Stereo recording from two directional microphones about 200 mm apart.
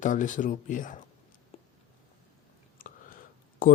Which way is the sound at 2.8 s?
45° left (ahead or behind).